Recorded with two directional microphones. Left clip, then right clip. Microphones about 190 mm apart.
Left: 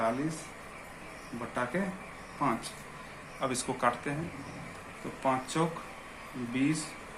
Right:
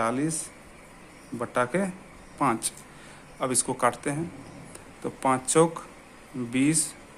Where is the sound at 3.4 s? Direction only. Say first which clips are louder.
Right 5 dB; 45° right (ahead or behind).